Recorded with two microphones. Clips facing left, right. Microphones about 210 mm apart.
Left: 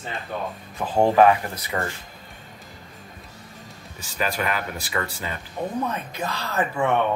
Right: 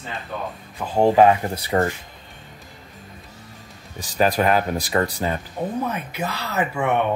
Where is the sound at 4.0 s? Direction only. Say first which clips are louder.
Right 7 dB; 35° right (ahead or behind).